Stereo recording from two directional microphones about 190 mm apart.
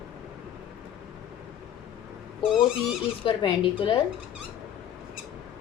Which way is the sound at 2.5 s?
5° right (ahead or behind).